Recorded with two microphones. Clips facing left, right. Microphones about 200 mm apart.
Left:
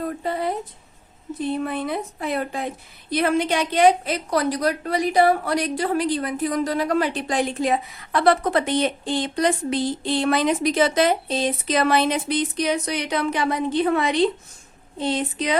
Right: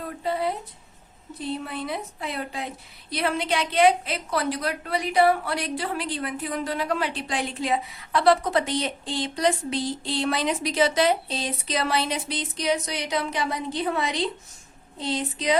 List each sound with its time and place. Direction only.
0.2 s a woman's voice: 50° left (ahead or behind)